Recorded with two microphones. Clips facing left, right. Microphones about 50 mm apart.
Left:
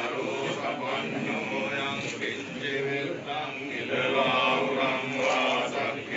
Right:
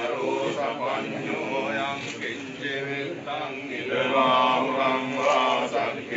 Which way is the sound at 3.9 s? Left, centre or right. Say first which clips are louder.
Right 4 dB; right.